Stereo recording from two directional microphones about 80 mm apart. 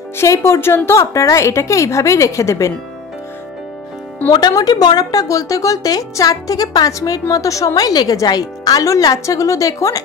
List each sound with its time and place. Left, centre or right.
0.2 s a woman's voice: left
4.3 s speech: left